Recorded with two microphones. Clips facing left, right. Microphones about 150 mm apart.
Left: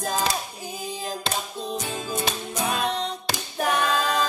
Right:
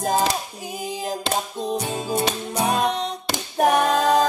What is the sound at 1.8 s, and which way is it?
Music, 35° right (ahead or behind).